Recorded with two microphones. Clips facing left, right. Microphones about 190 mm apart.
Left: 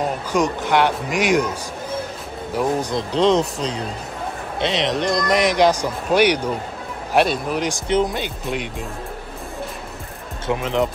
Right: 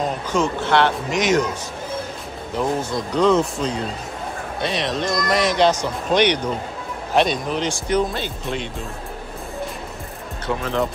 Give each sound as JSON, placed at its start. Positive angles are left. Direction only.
{"t": 0.0, "sound": "speech", "side_deg": 15}
{"t": 2.5, "sound": "speech", "side_deg": 15}
{"t": 3.1, "sound": "speech", "side_deg": 30}
{"t": 4.6, "sound": "speech", "side_deg": 20}
{"t": 10.4, "sound": "speech", "side_deg": 15}